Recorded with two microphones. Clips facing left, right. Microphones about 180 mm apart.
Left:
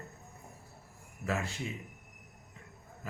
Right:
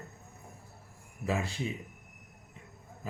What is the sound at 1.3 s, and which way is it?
Speech, 15° right (ahead or behind).